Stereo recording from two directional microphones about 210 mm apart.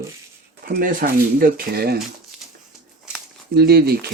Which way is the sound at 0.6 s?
40° right (ahead or behind).